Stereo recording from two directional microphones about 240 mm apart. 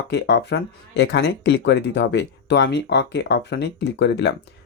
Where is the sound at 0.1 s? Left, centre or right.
Left.